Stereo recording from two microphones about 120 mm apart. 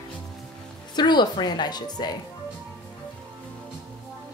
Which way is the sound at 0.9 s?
35° left (ahead or behind).